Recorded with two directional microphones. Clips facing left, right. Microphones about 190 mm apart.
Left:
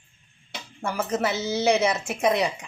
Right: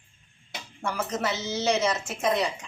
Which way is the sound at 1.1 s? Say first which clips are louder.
Left 7 dB; 10° left (ahead or behind).